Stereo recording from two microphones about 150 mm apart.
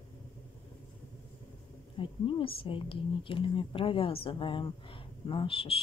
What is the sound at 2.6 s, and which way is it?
Speech, 35° left (ahead or behind).